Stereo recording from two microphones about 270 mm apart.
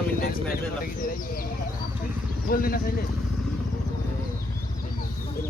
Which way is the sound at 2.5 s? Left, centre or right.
Left.